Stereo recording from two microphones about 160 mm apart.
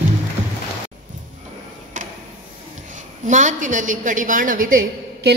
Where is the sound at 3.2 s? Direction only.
50° right (ahead or behind).